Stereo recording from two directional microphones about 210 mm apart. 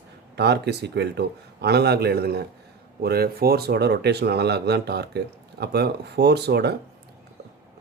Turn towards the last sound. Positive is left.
turn(degrees=-50)  # may be behind; listen again after turning